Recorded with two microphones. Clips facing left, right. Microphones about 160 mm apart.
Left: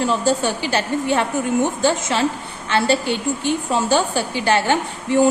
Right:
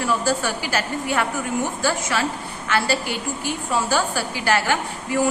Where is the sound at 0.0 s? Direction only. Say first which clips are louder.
Left 3 dB; 25° left (ahead or behind).